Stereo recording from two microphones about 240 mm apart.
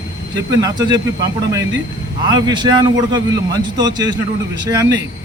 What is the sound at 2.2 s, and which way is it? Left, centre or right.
A man's voice, centre.